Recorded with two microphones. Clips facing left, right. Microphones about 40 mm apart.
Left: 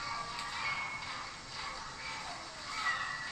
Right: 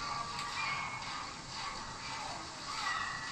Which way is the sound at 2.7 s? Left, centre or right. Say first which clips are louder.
Left 2 dB; centre.